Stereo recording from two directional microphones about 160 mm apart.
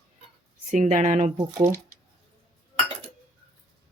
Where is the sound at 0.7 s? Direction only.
50° right (ahead or behind).